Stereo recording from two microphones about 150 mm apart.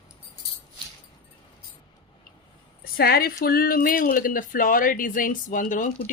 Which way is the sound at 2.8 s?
90° left.